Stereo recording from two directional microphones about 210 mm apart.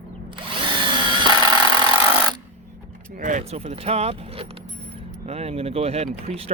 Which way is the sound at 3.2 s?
35° right (ahead or behind).